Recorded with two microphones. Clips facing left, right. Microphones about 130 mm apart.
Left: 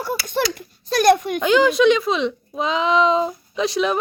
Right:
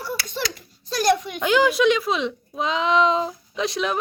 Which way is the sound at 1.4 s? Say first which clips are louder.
Left 3 dB; 5° right (ahead or behind).